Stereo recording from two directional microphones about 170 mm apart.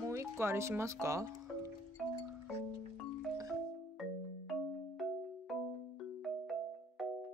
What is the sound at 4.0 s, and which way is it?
Music, centre (ahead or behind).